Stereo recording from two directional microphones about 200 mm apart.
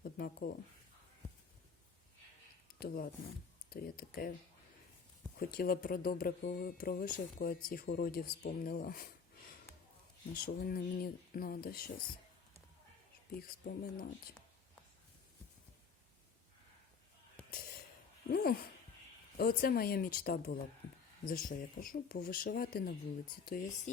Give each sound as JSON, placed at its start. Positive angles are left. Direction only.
{"t": 0.0, "sound": "a sound", "side_deg": 50}
{"t": 2.7, "sound": "speech", "side_deg": 50}
{"t": 5.4, "sound": "speech", "side_deg": 45}
{"t": 10.4, "sound": "speech", "side_deg": 50}
{"t": 13.7, "sound": "speech", "side_deg": 50}
{"t": 17.5, "sound": "a sound", "side_deg": 45}
{"t": 18.3, "sound": "speech", "side_deg": 50}
{"t": 23.5, "sound": "speech", "side_deg": 40}